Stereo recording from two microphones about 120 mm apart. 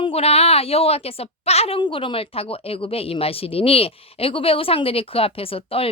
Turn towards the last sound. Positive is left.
turn(degrees=50)  # may be behind; listen again after turning